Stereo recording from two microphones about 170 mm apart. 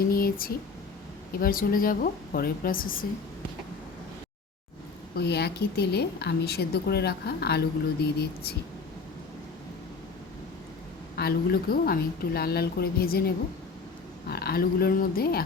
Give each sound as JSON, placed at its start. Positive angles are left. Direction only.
{"t": 0.1, "sound": "a sound", "side_deg": 60}
{"t": 1.4, "sound": "a woman's voice", "side_deg": 55}
{"t": 5.1, "sound": "a woman's voice", "side_deg": 75}
{"t": 11.2, "sound": "a woman's voice", "side_deg": 65}